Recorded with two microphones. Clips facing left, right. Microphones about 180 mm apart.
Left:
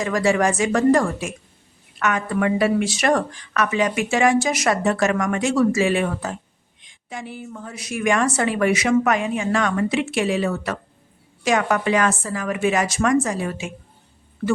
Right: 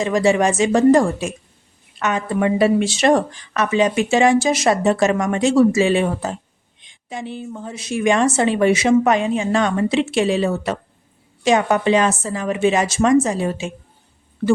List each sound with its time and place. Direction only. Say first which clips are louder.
0.0 s speech: right 3 dB; 25° right (ahead or behind)